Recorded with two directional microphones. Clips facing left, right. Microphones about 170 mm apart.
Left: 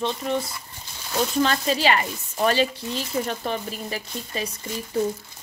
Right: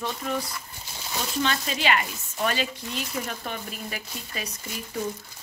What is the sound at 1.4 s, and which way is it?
Speech, 35° left (ahead or behind).